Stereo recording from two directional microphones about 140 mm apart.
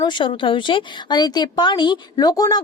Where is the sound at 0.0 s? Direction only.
35° left (ahead or behind).